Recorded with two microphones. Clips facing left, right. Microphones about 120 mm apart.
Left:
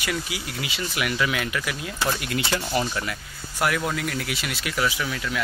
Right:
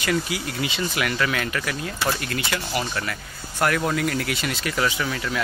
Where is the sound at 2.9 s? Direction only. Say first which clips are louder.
Right 1 dB; 15° left (ahead or behind).